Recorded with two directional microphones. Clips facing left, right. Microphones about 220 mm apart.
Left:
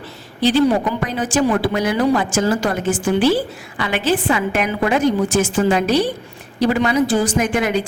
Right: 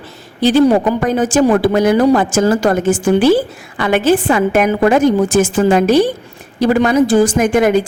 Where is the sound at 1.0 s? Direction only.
45° right (ahead or behind).